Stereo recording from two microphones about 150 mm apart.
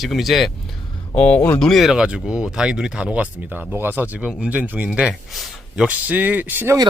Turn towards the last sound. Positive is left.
turn(degrees=-15)  # may be behind; listen again after turning